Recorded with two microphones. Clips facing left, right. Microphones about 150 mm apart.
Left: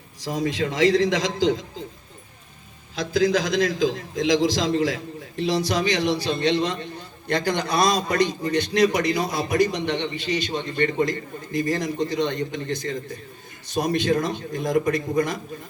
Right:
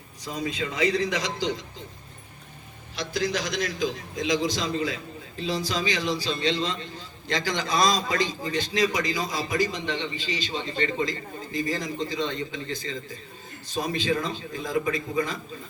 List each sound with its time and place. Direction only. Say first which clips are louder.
0.3 s a man's voice: left 6 dB; 85° left
3.7 s a man's voice: left 6 dB; 90° left; by 15.0 s 70° left (ahead or behind)